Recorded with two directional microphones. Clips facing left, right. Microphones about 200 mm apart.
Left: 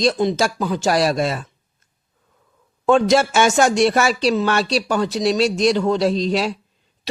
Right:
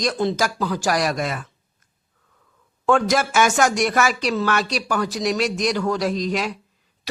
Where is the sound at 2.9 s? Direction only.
25° left (ahead or behind).